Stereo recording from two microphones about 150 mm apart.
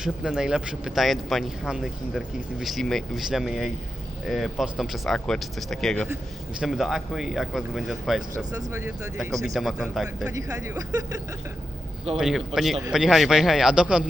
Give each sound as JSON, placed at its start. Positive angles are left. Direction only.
{"t": 0.0, "sound": "speech", "side_deg": -5}
{"t": 8.4, "sound": "speech", "side_deg": -25}
{"t": 9.4, "sound": "speech", "side_deg": 0}
{"t": 10.3, "sound": "speech", "side_deg": -20}
{"t": 12.1, "sound": "speech", "side_deg": 0}